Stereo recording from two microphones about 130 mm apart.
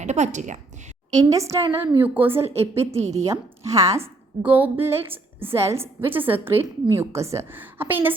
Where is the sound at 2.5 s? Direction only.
55° right (ahead or behind).